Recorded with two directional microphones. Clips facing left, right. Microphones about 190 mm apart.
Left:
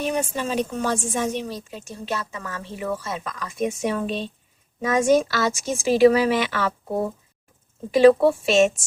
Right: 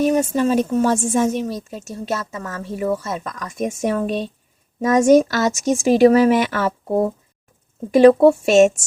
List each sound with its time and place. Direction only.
0.0 s a woman's voice: 40° right (ahead or behind)
7.9 s a woman's voice: 45° right (ahead or behind)